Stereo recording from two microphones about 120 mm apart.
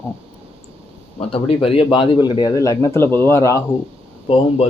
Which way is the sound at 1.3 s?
55° left (ahead or behind).